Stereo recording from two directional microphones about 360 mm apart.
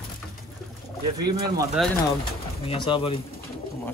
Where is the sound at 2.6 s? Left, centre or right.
Centre.